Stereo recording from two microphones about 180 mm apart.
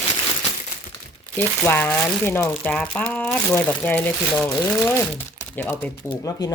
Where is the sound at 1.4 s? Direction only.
10° left (ahead or behind).